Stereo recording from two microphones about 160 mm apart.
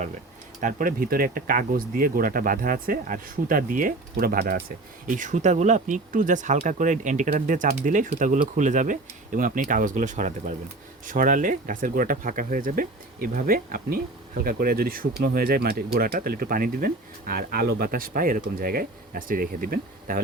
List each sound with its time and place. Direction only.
0.6 s speech: 60° right (ahead or behind); by 4.6 s 75° right (ahead or behind)
5.0 s speech: 55° right (ahead or behind)